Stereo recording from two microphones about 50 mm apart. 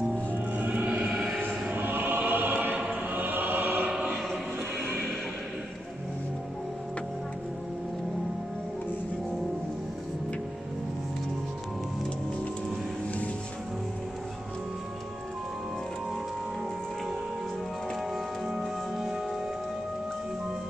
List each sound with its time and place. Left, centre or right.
0.6 s music: right
1.0 s music: centre
1.7 s choir: right
2.7 s choir: right
3.1 s choir: right
18.6 s music: centre